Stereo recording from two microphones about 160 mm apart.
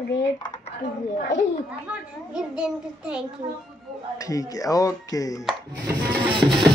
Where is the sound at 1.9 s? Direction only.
5° right (ahead or behind).